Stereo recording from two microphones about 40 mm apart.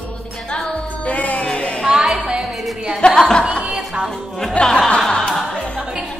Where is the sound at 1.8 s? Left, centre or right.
Centre.